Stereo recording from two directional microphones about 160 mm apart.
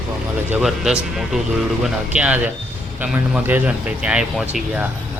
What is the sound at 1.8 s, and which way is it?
A man's voice, 5° right (ahead or behind).